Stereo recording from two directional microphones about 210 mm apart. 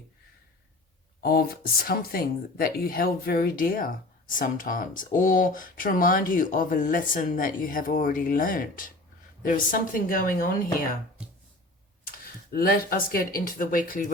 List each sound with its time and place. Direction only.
1.2 s speech: 45° left (ahead or behind)
12.1 s speech: 45° left (ahead or behind)